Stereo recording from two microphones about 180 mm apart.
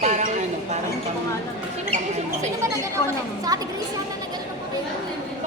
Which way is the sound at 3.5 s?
20° right (ahead or behind).